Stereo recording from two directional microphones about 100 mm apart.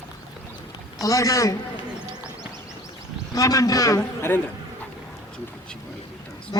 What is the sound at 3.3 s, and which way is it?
Speech, 35° left (ahead or behind).